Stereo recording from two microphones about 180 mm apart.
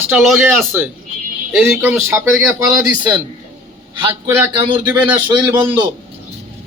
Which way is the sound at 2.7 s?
25° right (ahead or behind).